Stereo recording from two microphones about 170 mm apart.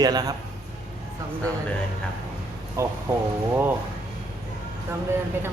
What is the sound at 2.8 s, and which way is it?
Speech, 15° right (ahead or behind).